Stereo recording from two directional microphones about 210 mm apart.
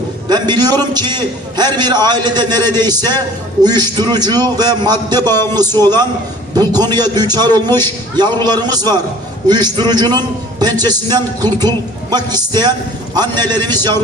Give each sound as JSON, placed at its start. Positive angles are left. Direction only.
{"t": 0.3, "sound": "a man's voice", "side_deg": -20}